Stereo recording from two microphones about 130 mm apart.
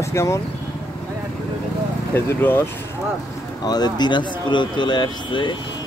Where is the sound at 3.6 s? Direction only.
30° left (ahead or behind).